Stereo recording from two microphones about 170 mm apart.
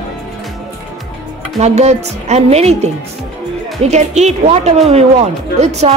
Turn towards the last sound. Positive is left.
turn(degrees=-40)  # may be behind; listen again after turning